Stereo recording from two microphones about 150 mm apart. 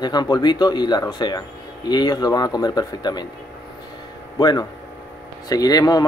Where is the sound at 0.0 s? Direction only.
25° left (ahead or behind).